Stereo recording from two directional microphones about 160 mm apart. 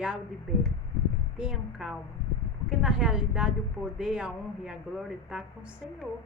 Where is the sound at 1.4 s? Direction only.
5° right (ahead or behind).